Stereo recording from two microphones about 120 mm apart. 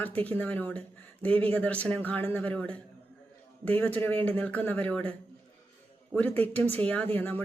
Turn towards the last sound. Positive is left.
turn(degrees=15)  # may be behind; listen again after turning